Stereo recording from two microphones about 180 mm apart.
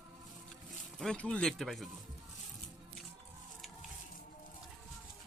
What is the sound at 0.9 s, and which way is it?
Speech, 5° left (ahead or behind).